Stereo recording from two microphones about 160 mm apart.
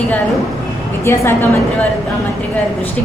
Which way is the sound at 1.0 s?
15° left (ahead or behind).